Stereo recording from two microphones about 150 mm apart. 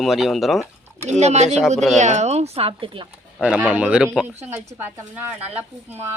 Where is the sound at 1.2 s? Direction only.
50° right (ahead or behind).